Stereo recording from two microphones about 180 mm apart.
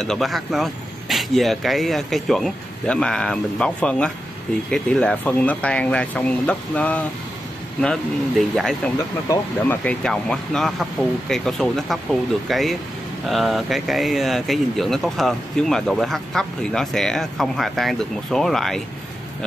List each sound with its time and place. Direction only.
0.0 s speech: centre (ahead or behind)